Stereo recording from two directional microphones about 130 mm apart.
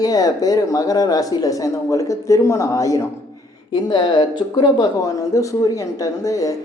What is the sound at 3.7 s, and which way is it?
Speech, 35° left (ahead or behind).